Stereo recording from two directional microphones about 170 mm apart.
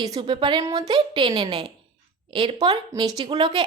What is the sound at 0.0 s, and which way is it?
A woman's voice, 25° right (ahead or behind).